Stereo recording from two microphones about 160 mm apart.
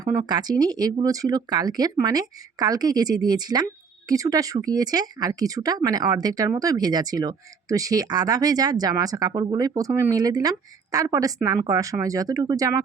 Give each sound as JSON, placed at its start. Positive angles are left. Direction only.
{"t": 0.0, "sound": "speech", "side_deg": -25}